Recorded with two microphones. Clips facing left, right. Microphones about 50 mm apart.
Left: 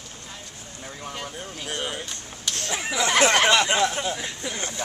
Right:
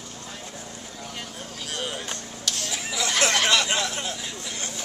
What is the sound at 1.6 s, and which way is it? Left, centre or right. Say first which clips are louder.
Speech: even; left.